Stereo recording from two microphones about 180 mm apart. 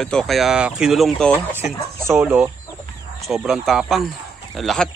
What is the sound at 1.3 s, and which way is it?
Speech, 10° right (ahead or behind).